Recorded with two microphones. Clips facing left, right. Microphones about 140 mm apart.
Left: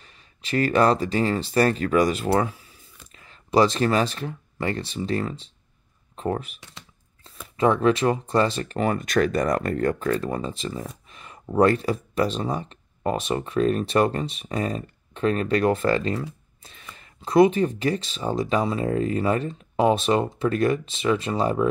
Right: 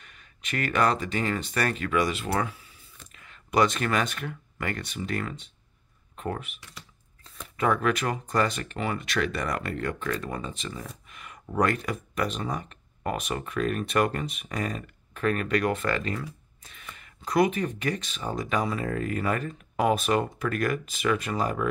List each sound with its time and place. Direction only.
0.0 s speech: 30° left (ahead or behind)